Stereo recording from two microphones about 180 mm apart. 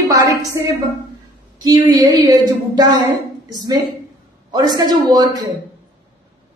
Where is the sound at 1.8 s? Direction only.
20° right (ahead or behind).